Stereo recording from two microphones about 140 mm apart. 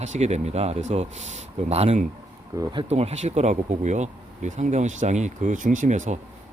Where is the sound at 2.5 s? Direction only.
25° right (ahead or behind).